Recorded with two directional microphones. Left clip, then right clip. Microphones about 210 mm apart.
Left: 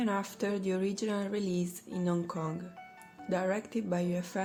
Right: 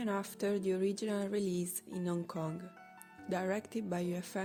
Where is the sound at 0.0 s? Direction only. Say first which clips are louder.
Left 3 dB; 40° right (ahead or behind).